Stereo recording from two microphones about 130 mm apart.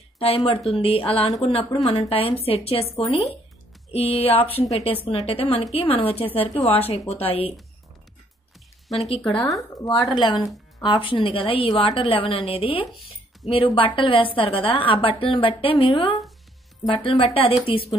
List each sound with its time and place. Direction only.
0.7 s a woman's voice: 45° left (ahead or behind)
8.8 s speech: centre (ahead or behind)
10.1 s a woman's voice: 40° left (ahead or behind)